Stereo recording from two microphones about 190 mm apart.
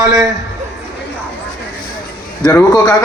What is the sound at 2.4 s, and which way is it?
Speech, 20° left (ahead or behind).